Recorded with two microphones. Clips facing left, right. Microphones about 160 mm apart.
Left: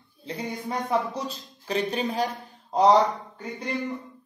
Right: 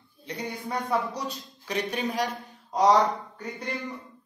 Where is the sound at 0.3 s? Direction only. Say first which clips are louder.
Left 1 dB; 20° left (ahead or behind).